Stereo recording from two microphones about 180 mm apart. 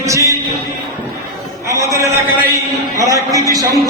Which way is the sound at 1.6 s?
15° right (ahead or behind).